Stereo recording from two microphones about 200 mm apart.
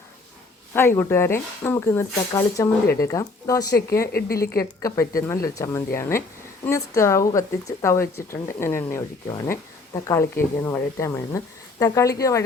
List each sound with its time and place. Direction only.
0.7 s speech: 10° left (ahead or behind)
4.1 s speech: 50° left (ahead or behind)
4.4 s speech: 15° left (ahead or behind)